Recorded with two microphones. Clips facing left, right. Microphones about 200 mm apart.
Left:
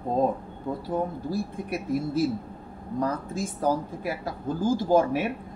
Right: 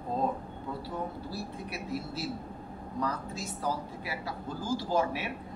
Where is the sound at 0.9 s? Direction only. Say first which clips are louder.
Left 11 dB; 50° left (ahead or behind).